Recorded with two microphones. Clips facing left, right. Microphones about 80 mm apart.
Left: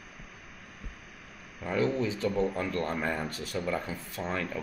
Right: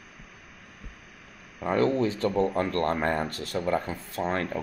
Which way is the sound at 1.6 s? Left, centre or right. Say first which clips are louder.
Right 5 dB; right.